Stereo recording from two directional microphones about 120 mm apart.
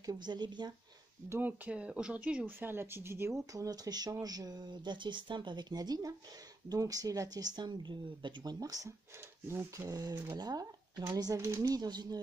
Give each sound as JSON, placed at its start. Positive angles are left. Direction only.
{"t": 0.0, "sound": "speech", "side_deg": -35}
{"t": 1.3, "sound": "speech", "side_deg": -15}